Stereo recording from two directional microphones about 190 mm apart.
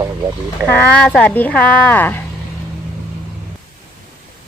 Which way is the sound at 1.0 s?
5° left (ahead or behind).